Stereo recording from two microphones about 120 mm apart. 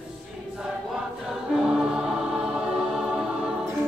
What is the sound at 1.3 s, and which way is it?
Choir, centre (ahead or behind).